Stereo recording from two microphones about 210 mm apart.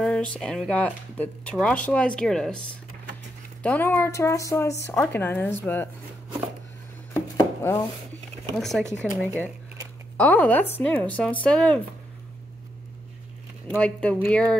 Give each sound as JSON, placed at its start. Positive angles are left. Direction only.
{"t": 0.0, "sound": "speech", "side_deg": 5}
{"t": 3.6, "sound": "speech", "side_deg": 10}
{"t": 7.2, "sound": "a sound", "side_deg": 10}
{"t": 8.5, "sound": "speech", "side_deg": 0}
{"t": 13.7, "sound": "speech", "side_deg": 5}